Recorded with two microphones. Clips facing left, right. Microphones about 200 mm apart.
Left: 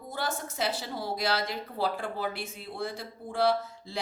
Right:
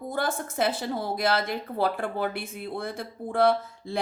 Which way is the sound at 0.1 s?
55° right (ahead or behind).